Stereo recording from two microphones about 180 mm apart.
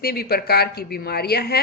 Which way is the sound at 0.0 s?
60° left (ahead or behind).